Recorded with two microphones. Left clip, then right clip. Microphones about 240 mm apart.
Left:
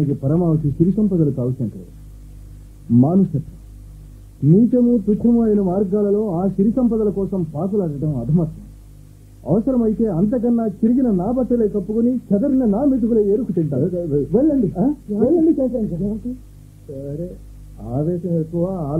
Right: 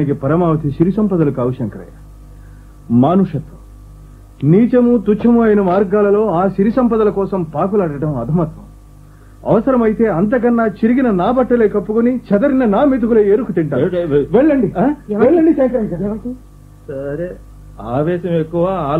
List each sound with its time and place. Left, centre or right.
0.2 s a man's voice: right
3.0 s a man's voice: right
4.6 s a man's voice: right
17.7 s a man's voice: right